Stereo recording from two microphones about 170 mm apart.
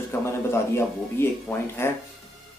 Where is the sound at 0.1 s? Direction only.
15° left (ahead or behind).